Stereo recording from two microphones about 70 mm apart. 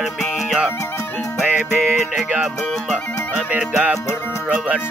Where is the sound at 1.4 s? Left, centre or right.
Centre.